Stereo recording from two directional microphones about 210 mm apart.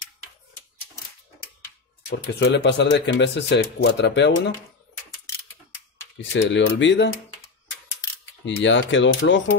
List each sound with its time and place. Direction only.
2.0 s speech: 55° left (ahead or behind)
6.3 s speech: 60° left (ahead or behind)
8.5 s speech: 60° left (ahead or behind)